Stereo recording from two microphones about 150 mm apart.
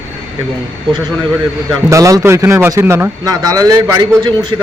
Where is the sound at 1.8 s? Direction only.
20° right (ahead or behind).